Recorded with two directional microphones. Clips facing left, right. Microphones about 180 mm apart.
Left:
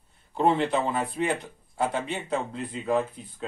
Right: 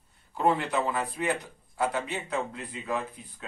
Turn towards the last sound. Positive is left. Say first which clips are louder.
# left 7 dB
turn(degrees=30)  # may be behind; listen again after turning